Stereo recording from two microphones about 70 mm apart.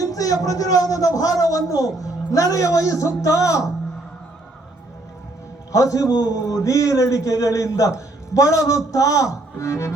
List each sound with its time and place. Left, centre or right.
0.0 s a sound: left
0.4 s a man's voice: left
5.7 s a man's voice: left